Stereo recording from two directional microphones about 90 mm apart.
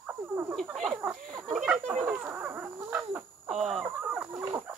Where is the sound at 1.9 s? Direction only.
20° right (ahead or behind).